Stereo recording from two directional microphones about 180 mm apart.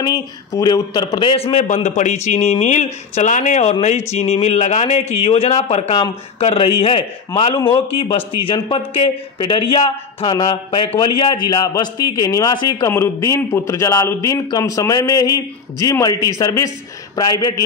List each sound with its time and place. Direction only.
0.0 s a man's voice: 20° left (ahead or behind)